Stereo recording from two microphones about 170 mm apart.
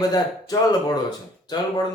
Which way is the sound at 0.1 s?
25° left (ahead or behind).